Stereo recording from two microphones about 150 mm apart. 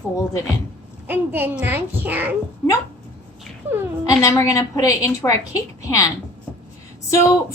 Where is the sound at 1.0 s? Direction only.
15° right (ahead or behind).